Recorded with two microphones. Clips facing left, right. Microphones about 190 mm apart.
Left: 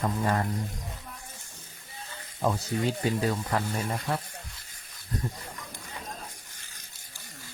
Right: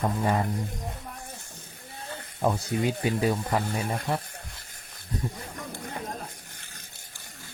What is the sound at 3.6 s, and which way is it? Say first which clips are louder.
Speech: right 1 dB; 55° right (ahead or behind).